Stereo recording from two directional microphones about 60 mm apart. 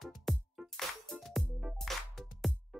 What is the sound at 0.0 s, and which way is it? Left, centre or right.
Music, centre.